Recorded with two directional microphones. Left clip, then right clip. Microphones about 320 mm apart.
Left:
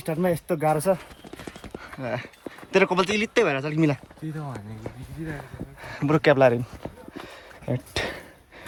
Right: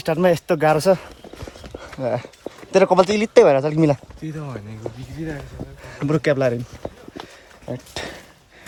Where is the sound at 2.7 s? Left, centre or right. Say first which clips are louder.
Right 6 dB; centre.